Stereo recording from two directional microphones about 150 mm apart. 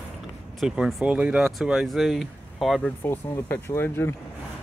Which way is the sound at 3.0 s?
15° left (ahead or behind).